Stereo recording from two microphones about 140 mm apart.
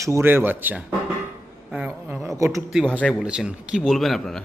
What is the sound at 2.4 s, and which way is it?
Speech, 20° right (ahead or behind).